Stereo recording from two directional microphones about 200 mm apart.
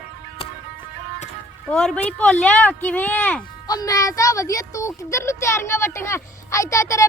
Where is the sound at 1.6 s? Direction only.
5° left (ahead or behind).